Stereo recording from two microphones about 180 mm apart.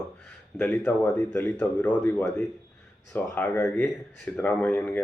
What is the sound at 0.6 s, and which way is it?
Speech, 5° left (ahead or behind).